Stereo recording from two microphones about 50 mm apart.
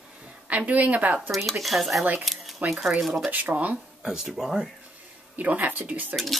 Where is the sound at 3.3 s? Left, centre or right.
Right.